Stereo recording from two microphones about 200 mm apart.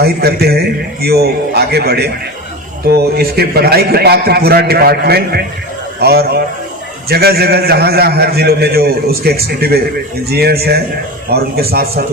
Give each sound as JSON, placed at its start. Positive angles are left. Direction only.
{"t": 0.0, "sound": "a man's voice", "side_deg": -50}